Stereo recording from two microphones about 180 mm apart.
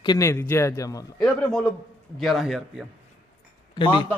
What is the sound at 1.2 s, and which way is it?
A man's voice, 5° left (ahead or behind).